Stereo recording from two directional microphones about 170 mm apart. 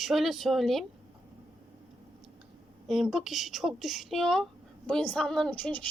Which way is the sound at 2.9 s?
Centre (ahead or behind).